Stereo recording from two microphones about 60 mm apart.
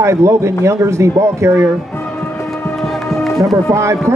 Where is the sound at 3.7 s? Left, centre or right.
Right.